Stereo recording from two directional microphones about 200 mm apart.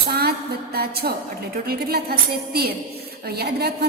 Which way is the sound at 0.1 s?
50° right (ahead or behind).